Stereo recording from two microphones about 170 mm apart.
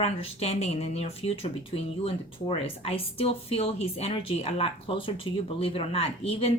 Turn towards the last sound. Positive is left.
turn(degrees=35)  # may be behind; listen again after turning